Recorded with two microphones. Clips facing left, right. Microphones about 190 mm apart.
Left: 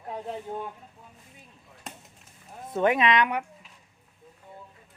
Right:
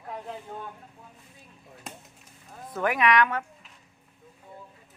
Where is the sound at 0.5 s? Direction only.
25° left (ahead or behind).